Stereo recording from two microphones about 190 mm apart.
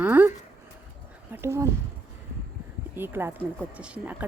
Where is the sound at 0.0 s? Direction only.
10° right (ahead or behind).